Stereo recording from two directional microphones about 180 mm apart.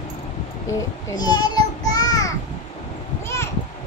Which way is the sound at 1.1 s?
20° left (ahead or behind).